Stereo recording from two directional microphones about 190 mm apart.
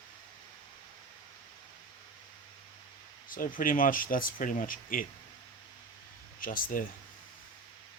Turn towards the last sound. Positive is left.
turn(degrees=45)  # may be behind; listen again after turning